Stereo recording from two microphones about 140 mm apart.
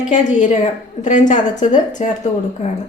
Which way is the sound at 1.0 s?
60° left (ahead or behind).